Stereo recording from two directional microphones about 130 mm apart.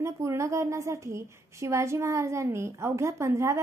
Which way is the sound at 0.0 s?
20° right (ahead or behind).